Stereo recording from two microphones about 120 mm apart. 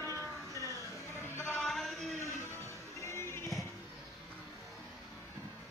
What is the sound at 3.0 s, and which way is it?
Music, 25° left (ahead or behind).